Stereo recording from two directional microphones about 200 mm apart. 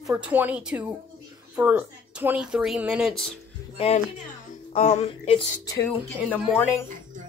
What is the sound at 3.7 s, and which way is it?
Speech, 30° left (ahead or behind).